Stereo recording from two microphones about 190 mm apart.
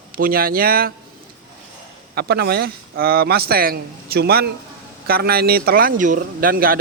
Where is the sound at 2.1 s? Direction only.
55° right (ahead or behind).